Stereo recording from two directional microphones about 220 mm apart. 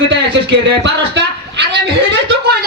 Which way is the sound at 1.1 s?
50° right (ahead or behind).